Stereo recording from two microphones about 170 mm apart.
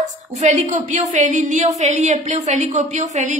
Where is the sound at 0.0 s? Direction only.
45° right (ahead or behind).